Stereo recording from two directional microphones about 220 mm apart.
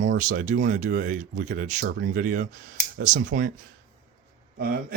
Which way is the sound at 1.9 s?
50° right (ahead or behind).